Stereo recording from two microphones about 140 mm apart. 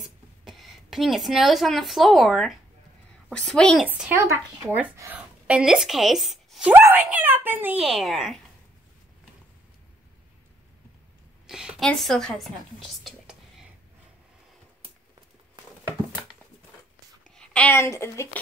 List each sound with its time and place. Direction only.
0.5 s a child's voice: centre (ahead or behind)
3.8 s a child's voice: 15° right (ahead or behind)
6.7 s a child's voice: 15° right (ahead or behind)
11.4 s a woman's voice: 5° right (ahead or behind)
13.0 s whispering: 5° right (ahead or behind)
17.4 s a sound: 5° left (ahead or behind)
17.7 s a woman's voice: 20° left (ahead or behind)